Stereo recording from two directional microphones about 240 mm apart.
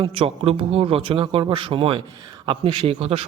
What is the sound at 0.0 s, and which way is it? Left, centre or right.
A man's voice, right.